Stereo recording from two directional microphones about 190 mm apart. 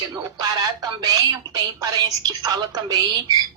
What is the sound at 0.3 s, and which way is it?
A man's voice, 20° right (ahead or behind).